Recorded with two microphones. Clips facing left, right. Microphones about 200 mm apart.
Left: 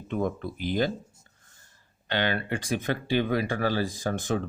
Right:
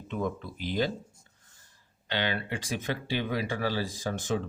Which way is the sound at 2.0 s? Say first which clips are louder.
Left 3 dB; 50° left (ahead or behind).